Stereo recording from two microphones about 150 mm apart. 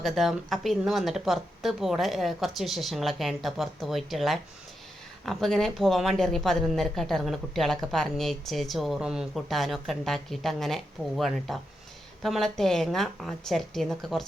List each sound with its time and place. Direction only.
0.0 s speech: centre (ahead or behind)